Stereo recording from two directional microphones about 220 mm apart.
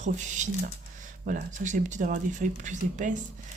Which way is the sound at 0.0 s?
35° right (ahead or behind).